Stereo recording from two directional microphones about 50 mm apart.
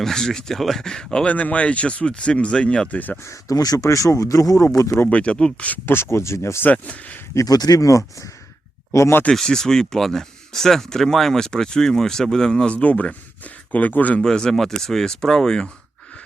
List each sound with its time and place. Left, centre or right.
0.0 s speech: centre
1.3 s speech: left
2.9 s speech: left
3.8 s speech: left
4.8 s speech: left
5.0 s speech: left
5.8 s speech: left
6.7 s speech: left
7.9 s speech: left
8.9 s speech: left
9.3 s speech: centre
12.7 s speech: left
14.2 s speech: centre